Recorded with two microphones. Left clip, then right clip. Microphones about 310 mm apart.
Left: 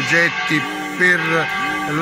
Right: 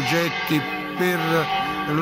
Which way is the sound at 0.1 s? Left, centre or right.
Centre.